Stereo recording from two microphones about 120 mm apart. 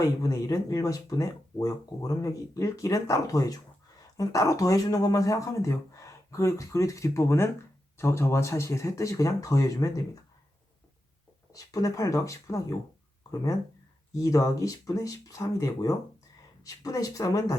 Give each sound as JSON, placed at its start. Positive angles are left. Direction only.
{"t": 0.0, "sound": "speech", "side_deg": 30}
{"t": 11.5, "sound": "speech", "side_deg": 30}
{"t": 14.2, "sound": "speech", "side_deg": 30}